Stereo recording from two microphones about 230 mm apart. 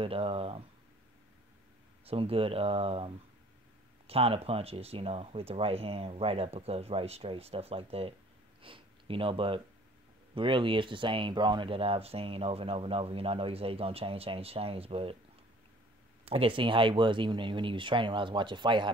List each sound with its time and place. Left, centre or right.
0.0 s speech: right
2.0 s speech: right
4.1 s speech: right
16.3 s speech: right